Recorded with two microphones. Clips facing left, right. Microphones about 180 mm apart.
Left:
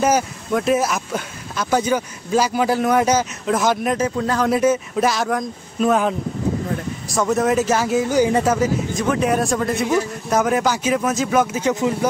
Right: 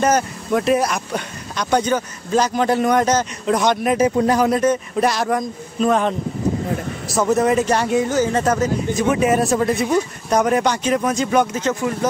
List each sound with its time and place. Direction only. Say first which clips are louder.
0.5 s speech: right 1 dB; centre (ahead or behind)
3.9 s speech: right 4 dB; 15° right (ahead or behind)
4.5 s speech: even; 5° left (ahead or behind)
8.1 s speech: left 1 dB; 15° left (ahead or behind)
8.9 s speech: right 2 dB; centre (ahead or behind)
11.7 s speech: left 1 dB; 20° left (ahead or behind)